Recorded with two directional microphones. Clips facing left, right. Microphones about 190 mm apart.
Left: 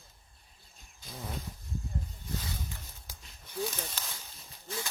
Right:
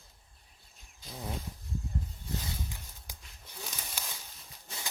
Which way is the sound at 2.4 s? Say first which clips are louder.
Even; 15° right (ahead or behind).